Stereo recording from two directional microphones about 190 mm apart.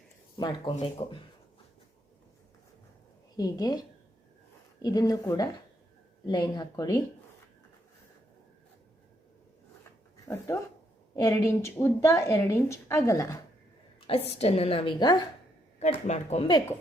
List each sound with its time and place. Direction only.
0.3 s a woman's voice: 25° left (ahead or behind)
3.3 s a woman's voice: 20° left (ahead or behind)
10.2 s speech: 15° left (ahead or behind)
14.1 s a woman's voice: 30° left (ahead or behind)
15.8 s speech: 35° left (ahead or behind)